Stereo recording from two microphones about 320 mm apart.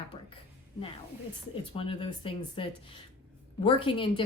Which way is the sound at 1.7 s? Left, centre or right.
Centre.